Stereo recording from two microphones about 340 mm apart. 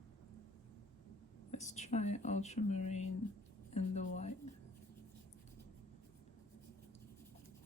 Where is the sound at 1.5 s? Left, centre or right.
Centre.